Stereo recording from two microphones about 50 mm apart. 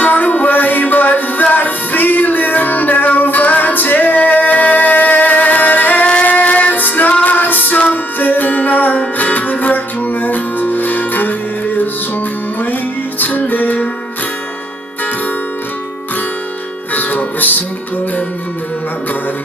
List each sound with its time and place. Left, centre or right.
0.0 s music: left
13.2 s music: left
16.9 s music: left